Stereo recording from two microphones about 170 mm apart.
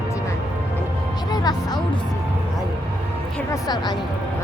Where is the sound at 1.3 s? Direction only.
25° left (ahead or behind).